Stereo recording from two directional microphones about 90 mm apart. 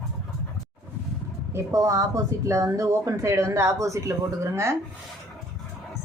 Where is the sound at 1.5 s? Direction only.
35° right (ahead or behind).